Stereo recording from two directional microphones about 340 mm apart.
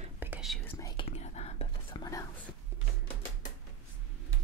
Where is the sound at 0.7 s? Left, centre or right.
Centre.